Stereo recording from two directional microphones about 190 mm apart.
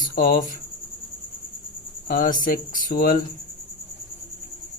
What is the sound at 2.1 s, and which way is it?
Speech, 45° left (ahead or behind).